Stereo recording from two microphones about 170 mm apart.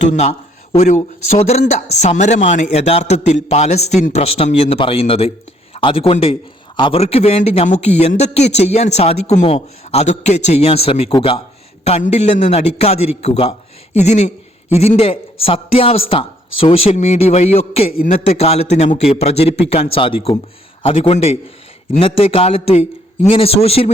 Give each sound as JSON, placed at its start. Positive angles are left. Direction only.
{"t": 0.0, "sound": "a man's voice", "side_deg": 45}